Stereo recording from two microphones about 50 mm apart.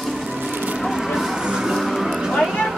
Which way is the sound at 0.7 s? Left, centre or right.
Centre.